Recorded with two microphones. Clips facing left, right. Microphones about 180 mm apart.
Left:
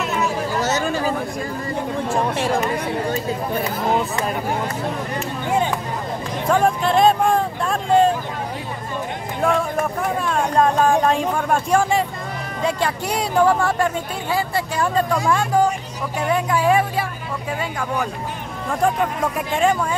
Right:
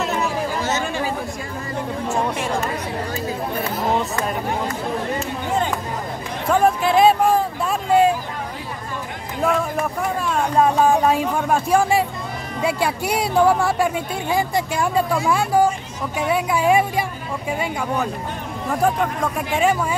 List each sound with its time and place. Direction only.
0.6 s chatter: 40° left (ahead or behind)
6.5 s a sound: 5° right (ahead or behind)
10.2 s speech: 5° right (ahead or behind)
18.7 s speech: centre (ahead or behind)